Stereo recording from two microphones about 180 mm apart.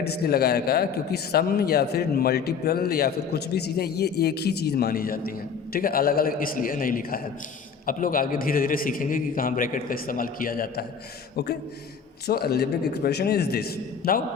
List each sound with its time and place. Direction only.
0.0 s a man's voice: 60° left (ahead or behind)
12.3 s a man's voice: 60° left (ahead or behind)